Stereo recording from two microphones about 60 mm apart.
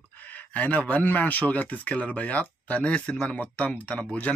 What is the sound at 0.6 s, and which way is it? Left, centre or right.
Speech, left.